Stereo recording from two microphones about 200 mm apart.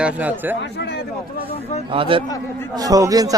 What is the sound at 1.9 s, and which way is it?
A man's voice, 25° right (ahead or behind).